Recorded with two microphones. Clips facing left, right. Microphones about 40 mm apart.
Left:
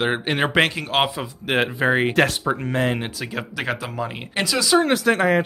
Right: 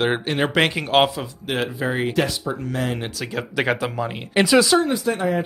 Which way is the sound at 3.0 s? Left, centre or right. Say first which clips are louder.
Right 1 dB; centre.